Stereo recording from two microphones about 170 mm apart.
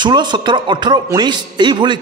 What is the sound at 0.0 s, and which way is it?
A man's voice, 25° right (ahead or behind).